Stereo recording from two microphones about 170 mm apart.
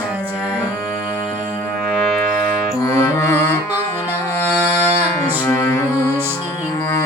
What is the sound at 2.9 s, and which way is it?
Music, 15° left (ahead or behind).